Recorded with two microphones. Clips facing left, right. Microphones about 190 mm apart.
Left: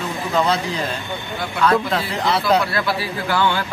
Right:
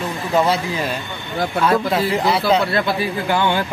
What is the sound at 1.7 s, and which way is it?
Speech, 15° right (ahead or behind).